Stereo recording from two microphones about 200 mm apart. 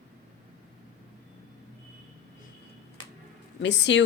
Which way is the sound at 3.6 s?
60° left (ahead or behind).